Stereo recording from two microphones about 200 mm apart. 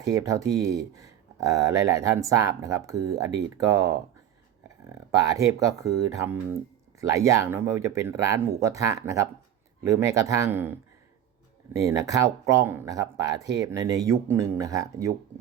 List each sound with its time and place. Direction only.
0.1 s speech: 15° right (ahead or behind)
5.2 s speech: 15° right (ahead or behind)
11.8 s speech: 15° right (ahead or behind)